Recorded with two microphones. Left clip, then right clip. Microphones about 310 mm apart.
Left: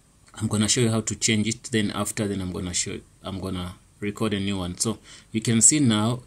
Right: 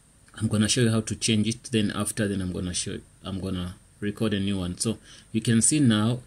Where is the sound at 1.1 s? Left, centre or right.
Left.